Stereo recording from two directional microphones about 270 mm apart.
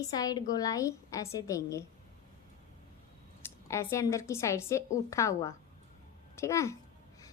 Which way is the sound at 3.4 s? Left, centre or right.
Centre.